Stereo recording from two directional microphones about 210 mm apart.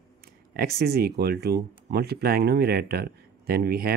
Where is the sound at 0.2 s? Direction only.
45° right (ahead or behind).